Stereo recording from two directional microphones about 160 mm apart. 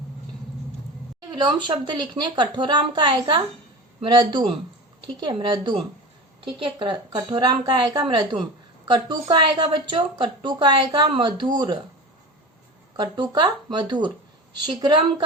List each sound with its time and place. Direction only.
1.5 s a woman's voice: 30° right (ahead or behind)
13.0 s a woman's voice: 30° right (ahead or behind)